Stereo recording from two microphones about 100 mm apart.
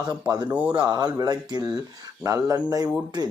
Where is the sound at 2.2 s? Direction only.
35° right (ahead or behind).